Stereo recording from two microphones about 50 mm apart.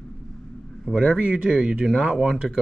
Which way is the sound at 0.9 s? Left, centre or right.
Centre.